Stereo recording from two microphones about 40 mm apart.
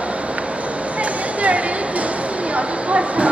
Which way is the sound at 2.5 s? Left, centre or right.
Right.